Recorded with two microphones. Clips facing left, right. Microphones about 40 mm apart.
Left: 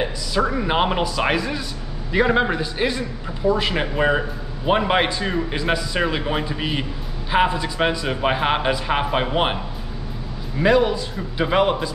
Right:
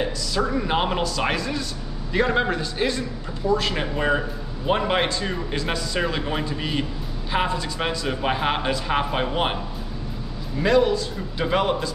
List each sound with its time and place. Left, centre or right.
0.0 s speech: centre
10.6 s speech: centre